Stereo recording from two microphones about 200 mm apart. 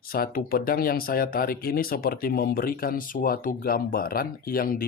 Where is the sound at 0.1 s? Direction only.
45° left (ahead or behind).